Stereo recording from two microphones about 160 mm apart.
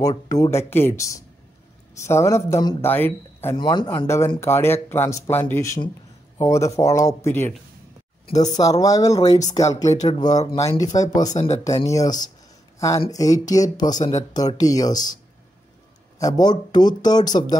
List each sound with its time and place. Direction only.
0.3 s a man's voice: 20° left (ahead or behind)
3.5 s speech: 25° left (ahead or behind)
4.4 s a man's voice: 15° left (ahead or behind)
11.2 s speech: 45° left (ahead or behind)
11.6 s speech: 20° left (ahead or behind)
16.2 s speech: 25° left (ahead or behind)